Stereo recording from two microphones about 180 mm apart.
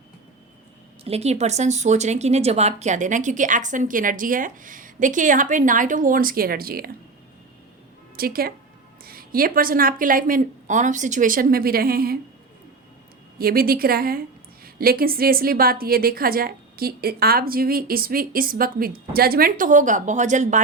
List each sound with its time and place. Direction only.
1.0 s speech: 35° right (ahead or behind); by 6.9 s 55° right (ahead or behind)
8.1 s a woman's voice: 55° right (ahead or behind)
13.4 s a woman's voice: 55° right (ahead or behind)